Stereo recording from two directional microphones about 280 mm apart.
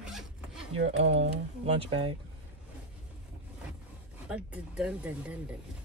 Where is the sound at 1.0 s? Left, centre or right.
Right.